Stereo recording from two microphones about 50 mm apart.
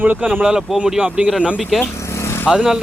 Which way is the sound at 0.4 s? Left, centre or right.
Centre.